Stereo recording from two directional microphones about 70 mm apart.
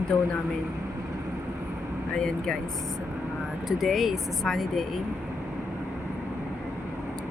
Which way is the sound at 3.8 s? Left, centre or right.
Centre.